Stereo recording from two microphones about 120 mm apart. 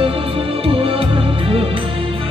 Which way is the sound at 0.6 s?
50° right (ahead or behind).